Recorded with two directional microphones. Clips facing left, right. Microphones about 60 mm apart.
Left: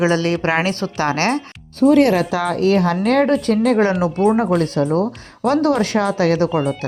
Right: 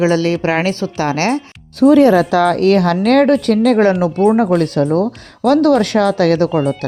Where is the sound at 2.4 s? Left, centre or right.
Right.